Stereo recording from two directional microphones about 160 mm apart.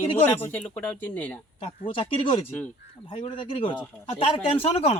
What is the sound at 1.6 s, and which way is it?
Speech, 35° left (ahead or behind).